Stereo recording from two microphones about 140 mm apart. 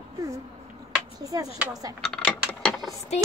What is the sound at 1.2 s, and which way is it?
Speech, 25° right (ahead or behind).